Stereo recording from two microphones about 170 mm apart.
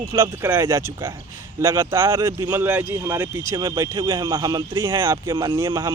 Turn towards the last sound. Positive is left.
turn(degrees=-15)  # may be behind; listen again after turning